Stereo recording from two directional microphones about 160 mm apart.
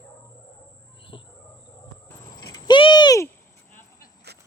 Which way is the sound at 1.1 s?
30° left (ahead or behind).